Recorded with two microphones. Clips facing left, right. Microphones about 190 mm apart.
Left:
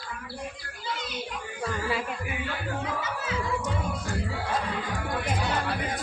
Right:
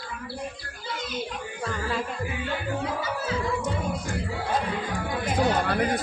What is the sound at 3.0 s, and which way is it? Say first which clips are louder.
Music: right 3 dB; 35° right (ahead or behind).